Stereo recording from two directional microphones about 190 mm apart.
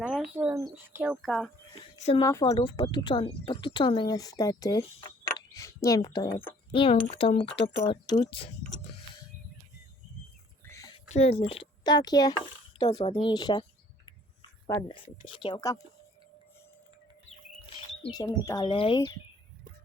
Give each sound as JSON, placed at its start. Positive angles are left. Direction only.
{"t": 0.0, "sound": "speech", "side_deg": -5}
{"t": 2.0, "sound": "speech", "side_deg": 35}
{"t": 2.2, "sound": "speech", "side_deg": 15}
{"t": 4.9, "sound": "speech", "side_deg": 30}
{"t": 5.5, "sound": "speech", "side_deg": 15}
{"t": 6.7, "sound": "speech", "side_deg": 30}
{"t": 8.7, "sound": "mechanisms", "side_deg": 20}
{"t": 10.7, "sound": "a sound", "side_deg": 15}
{"t": 11.1, "sound": "speech", "side_deg": 35}
{"t": 15.0, "sound": "speech", "side_deg": 25}
{"t": 17.2, "sound": "speech", "side_deg": 30}